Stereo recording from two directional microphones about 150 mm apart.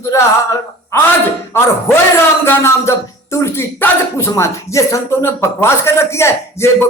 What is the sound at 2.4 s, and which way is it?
Speech, 20° left (ahead or behind).